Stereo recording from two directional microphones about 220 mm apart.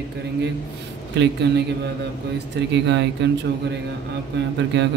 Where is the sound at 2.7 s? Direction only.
50° right (ahead or behind).